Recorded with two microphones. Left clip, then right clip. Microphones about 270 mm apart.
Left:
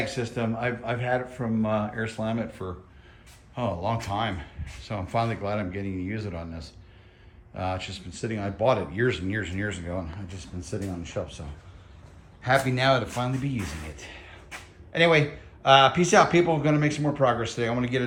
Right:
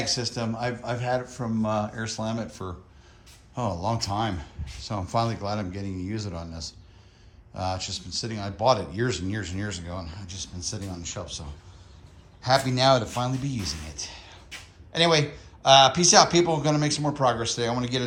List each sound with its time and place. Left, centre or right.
0.0 s speech: centre
7.5 s speech: centre
9.9 s speech: centre
12.5 s speech: centre
14.0 s a sound: centre
14.9 s speech: centre